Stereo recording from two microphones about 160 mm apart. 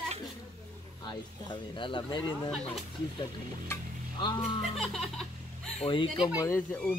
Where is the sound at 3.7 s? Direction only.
25° left (ahead or behind).